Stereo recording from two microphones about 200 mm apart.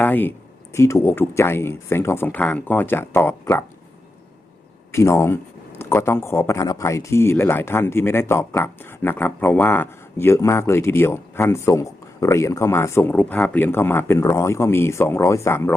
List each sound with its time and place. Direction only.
0.0 s speech: 10° left (ahead or behind)
4.9 s speech: 15° left (ahead or behind)